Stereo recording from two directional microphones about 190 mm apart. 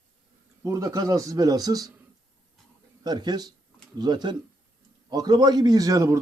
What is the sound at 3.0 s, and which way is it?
A man's voice, 20° right (ahead or behind).